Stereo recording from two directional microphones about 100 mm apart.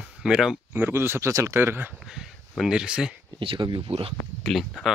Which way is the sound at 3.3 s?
55° right (ahead or behind).